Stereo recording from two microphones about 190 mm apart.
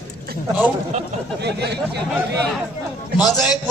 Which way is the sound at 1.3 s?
60° right (ahead or behind).